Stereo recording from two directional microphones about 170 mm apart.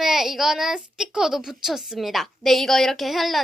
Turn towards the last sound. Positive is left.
turn(degrees=0)  # may be behind; listen again after turning